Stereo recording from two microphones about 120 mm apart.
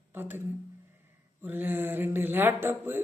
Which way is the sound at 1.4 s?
15° right (ahead or behind).